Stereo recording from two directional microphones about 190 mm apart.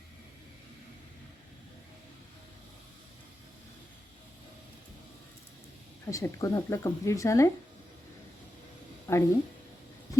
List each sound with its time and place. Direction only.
6.1 s speech: 15° left (ahead or behind)
9.1 s speech: 15° left (ahead or behind)